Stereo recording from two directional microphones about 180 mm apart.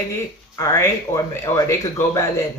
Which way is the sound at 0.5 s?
15° left (ahead or behind).